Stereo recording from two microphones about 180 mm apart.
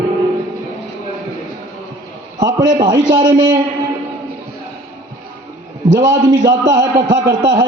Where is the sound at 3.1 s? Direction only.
30° right (ahead or behind).